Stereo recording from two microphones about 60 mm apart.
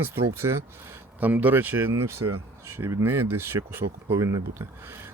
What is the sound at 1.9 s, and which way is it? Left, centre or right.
Speech, right.